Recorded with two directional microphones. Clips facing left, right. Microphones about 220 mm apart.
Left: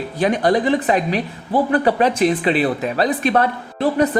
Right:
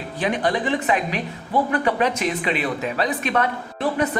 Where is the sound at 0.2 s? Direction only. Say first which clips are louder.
Left 6 dB; 40° left (ahead or behind).